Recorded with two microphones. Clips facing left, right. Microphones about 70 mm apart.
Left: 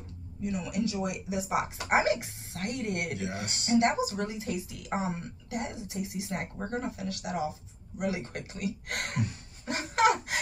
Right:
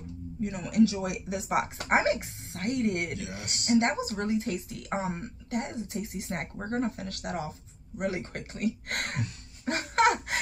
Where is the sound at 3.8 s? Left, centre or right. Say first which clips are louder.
Left 1 dB; right.